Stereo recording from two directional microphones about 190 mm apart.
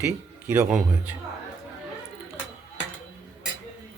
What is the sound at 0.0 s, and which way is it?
Speech, 10° right (ahead or behind).